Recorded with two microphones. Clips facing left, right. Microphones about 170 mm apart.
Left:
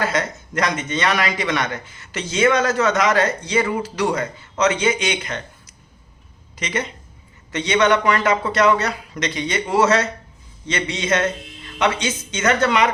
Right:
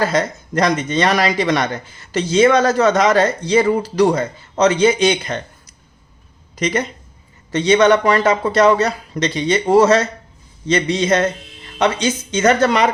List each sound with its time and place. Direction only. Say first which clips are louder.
0.0 s a man's voice: right 5 dB; 35° right (ahead or behind)
6.6 s a man's voice: right 6 dB; 40° right (ahead or behind)